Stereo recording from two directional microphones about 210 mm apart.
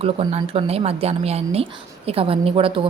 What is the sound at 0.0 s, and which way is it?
A woman's voice, 30° right (ahead or behind).